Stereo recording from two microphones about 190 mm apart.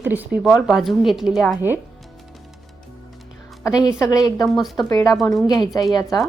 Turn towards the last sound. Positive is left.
turn(degrees=20)  # may be behind; listen again after turning